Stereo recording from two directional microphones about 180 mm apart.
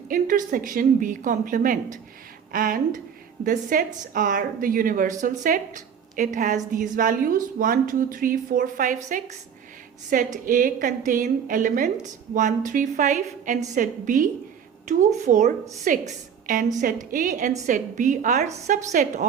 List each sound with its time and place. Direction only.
0.1 s a woman's voice: 50° right (ahead or behind)